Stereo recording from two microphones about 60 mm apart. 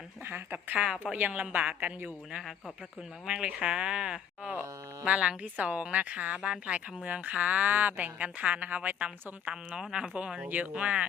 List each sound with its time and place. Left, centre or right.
0.3 s speech: right
3.2 s speech: centre
9.5 s speech: centre